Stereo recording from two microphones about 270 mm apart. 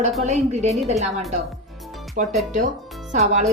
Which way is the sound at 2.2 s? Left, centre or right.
Right.